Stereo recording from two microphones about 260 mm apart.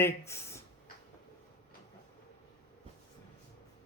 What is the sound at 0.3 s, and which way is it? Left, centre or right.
Speech, centre.